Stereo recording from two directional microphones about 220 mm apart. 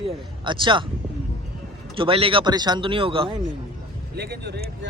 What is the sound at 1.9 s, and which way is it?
Speech, 25° right (ahead or behind).